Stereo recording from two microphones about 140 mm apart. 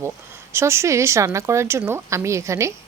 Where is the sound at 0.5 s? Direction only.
20° right (ahead or behind).